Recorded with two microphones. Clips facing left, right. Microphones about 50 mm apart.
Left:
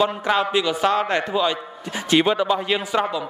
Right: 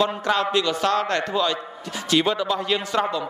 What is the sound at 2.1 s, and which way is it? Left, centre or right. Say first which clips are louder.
A man's voice: left 3 dB; left.